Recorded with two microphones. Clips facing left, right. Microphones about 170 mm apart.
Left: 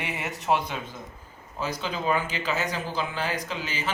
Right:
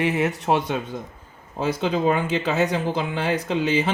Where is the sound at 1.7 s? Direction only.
60° right (ahead or behind).